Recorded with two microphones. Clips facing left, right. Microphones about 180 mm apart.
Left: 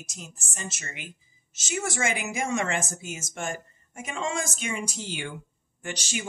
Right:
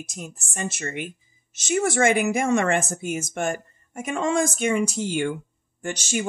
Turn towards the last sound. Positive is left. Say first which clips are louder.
# right 7 dB
turn(degrees=-50)  # may be behind; listen again after turning